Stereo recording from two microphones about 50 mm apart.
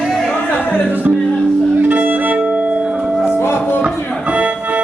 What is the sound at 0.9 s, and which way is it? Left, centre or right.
Music, right.